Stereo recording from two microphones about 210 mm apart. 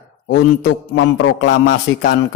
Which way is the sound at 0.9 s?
65° left (ahead or behind).